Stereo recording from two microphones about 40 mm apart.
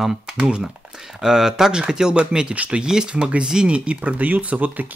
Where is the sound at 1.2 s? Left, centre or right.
Centre.